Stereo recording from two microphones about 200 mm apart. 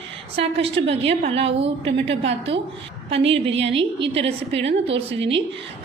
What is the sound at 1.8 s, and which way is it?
Speech, 65° right (ahead or behind).